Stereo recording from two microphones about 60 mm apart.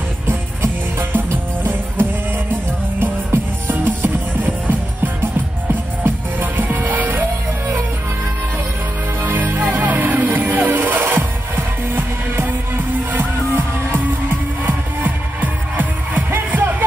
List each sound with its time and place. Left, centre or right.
1.1 s music: right
9.2 s music: right
15.4 s music: right